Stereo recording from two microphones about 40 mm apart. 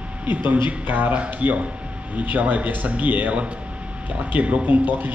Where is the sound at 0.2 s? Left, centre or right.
Right.